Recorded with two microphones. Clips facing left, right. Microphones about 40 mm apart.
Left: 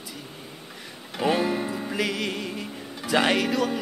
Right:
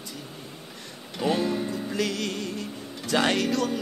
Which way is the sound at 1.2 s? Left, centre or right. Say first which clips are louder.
Left 2 dB; centre.